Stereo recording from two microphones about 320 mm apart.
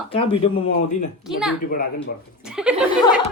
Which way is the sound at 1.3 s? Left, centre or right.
Centre.